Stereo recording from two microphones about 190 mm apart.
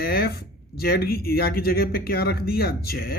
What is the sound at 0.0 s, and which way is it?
Speech, 55° left (ahead or behind).